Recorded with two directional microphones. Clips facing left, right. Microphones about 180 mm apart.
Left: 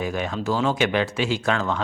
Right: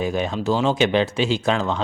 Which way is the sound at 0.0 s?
25° right (ahead or behind).